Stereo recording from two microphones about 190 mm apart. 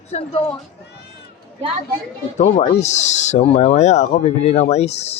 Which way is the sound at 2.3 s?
40° left (ahead or behind).